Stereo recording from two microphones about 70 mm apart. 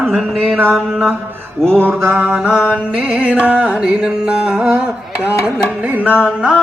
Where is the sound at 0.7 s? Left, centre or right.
Centre.